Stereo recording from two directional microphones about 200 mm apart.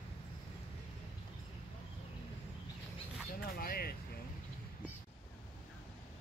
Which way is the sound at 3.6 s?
50° left (ahead or behind).